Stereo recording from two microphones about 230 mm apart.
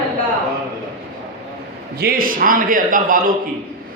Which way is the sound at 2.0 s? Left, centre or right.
Right.